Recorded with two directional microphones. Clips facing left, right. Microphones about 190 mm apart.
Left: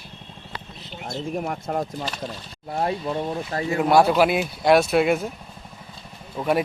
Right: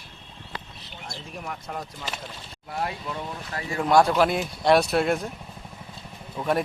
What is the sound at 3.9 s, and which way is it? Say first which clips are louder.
Speech: left 2 dB; 5° left (ahead or behind).